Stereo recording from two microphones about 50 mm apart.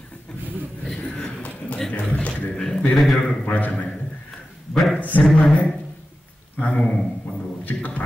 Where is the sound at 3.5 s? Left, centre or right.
Left.